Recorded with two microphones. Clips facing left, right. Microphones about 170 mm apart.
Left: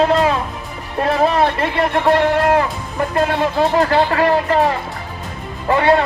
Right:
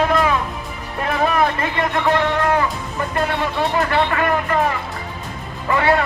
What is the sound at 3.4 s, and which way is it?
A man's voice, 35° left (ahead or behind).